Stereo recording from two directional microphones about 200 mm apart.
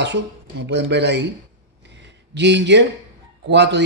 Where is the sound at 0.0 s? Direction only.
60° right (ahead or behind).